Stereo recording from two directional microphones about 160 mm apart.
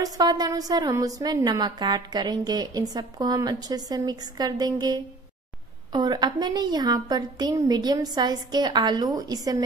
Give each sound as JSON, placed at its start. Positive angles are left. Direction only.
{"t": 0.0, "sound": "a woman's voice", "side_deg": -25}